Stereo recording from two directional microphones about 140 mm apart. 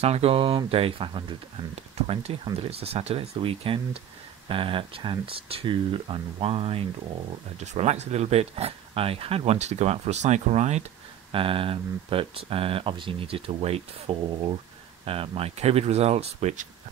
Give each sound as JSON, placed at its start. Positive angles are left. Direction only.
{"t": 0.0, "sound": "speech", "side_deg": -45}
{"t": 11.3, "sound": "speech", "side_deg": -40}